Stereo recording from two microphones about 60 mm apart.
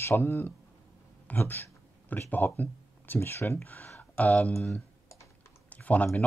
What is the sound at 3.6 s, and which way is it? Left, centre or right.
Speech, left.